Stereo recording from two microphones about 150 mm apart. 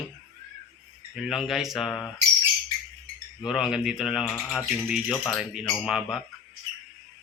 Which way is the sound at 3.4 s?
5° right (ahead or behind).